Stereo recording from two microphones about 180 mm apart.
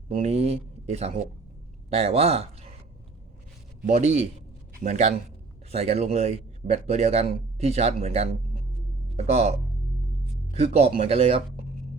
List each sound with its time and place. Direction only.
0.1 s a man's voice: 35° right (ahead or behind)
4.0 s a man's voice: 40° right (ahead or behind)